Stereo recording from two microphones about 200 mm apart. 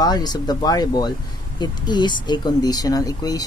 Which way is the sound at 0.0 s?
20° left (ahead or behind).